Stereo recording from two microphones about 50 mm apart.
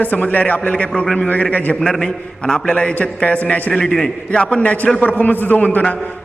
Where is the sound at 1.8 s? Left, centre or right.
Centre.